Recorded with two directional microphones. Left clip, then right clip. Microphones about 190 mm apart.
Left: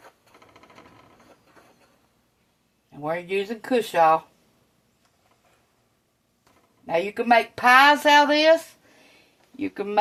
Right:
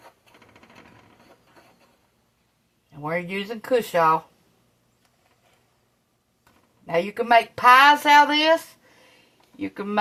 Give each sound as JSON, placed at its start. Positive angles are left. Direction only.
{"t": 3.0, "sound": "a woman's voice", "side_deg": 30}
{"t": 6.8, "sound": "a woman's voice", "side_deg": 30}
{"t": 9.6, "sound": "a woman's voice", "side_deg": 30}